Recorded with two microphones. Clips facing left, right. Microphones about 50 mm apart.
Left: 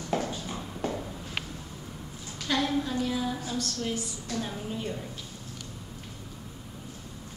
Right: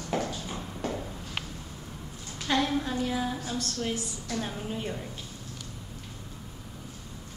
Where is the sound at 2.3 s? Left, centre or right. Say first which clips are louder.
Right 1 dB; centre.